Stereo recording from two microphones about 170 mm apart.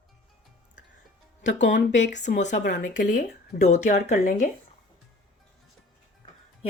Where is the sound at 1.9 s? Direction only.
90° left.